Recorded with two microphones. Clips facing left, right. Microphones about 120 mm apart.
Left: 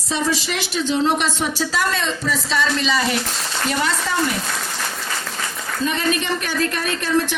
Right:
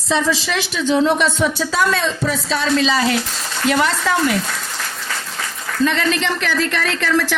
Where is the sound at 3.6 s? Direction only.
90° right.